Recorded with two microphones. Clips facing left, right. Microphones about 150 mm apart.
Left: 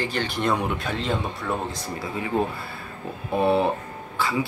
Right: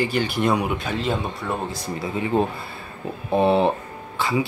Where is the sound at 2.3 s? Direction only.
20° right (ahead or behind).